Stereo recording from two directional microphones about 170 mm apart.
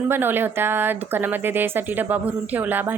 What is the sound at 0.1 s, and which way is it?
Speech, 10° right (ahead or behind).